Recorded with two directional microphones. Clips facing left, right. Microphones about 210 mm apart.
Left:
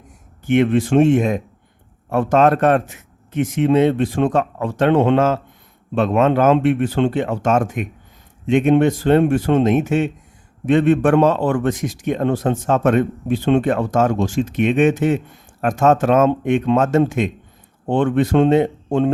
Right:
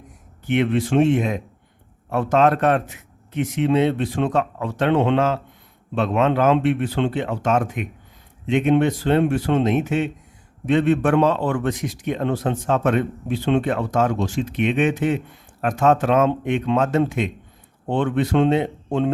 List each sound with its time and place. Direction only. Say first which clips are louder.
0.4 s a man's voice: left 4 dB; 45° left (ahead or behind)